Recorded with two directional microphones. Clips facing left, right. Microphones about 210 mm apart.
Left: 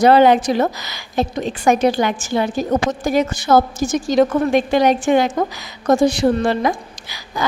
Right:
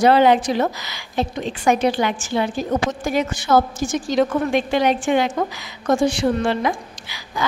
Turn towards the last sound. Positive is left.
turn(degrees=40)  # may be behind; listen again after turning